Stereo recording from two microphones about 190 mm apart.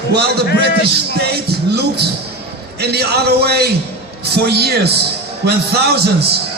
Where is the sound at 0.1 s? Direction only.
60° right (ahead or behind).